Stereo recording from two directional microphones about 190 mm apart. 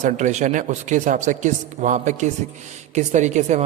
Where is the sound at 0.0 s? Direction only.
40° right (ahead or behind).